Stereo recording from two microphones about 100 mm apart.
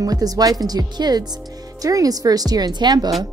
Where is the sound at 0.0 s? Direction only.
40° right (ahead or behind).